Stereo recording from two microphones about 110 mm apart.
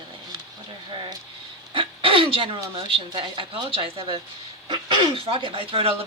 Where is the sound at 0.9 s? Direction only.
45° right (ahead or behind).